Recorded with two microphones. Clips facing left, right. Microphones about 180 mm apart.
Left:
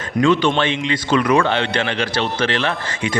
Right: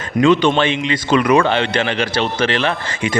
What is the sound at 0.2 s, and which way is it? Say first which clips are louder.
Speech: right 3 dB; 20° right (ahead or behind).